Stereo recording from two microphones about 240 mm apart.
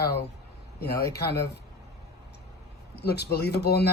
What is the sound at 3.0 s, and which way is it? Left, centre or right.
Speech, left.